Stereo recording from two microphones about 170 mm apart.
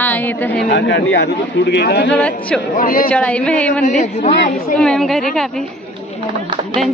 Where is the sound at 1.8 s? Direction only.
75° left (ahead or behind).